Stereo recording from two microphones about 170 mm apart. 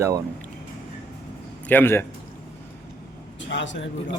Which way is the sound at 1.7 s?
10° left (ahead or behind).